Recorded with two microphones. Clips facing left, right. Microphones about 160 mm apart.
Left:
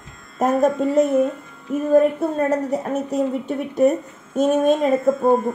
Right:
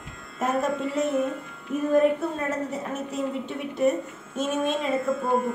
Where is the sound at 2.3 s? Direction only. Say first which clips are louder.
Left 8 dB; 40° left (ahead or behind).